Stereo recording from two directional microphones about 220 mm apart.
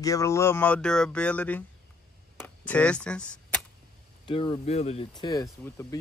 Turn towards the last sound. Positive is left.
turn(degrees=10)  # may be behind; listen again after turning